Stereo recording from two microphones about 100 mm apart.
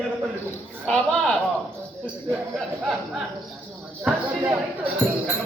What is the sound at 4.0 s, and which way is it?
Speech, 15° right (ahead or behind).